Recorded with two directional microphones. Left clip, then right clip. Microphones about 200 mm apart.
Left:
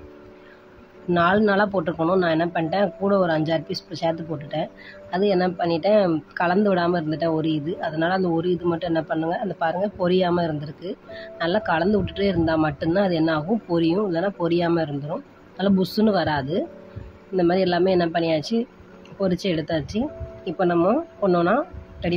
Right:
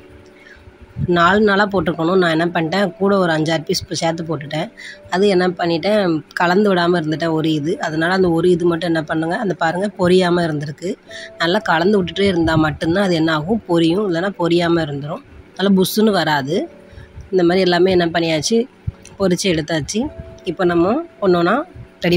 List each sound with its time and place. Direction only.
1.1 s speech: 25° right (ahead or behind)